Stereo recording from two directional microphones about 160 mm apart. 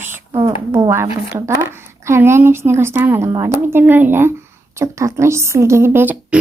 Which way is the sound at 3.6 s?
15° right (ahead or behind).